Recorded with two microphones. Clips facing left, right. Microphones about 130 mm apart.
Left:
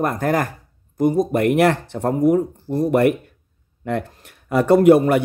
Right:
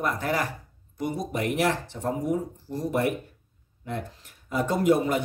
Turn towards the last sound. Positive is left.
turn(degrees=65)  # may be behind; listen again after turning